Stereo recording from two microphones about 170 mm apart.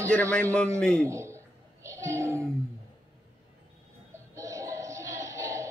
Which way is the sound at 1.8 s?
15° right (ahead or behind).